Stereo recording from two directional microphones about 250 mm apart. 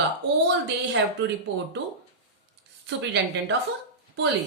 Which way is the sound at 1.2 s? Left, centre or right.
Right.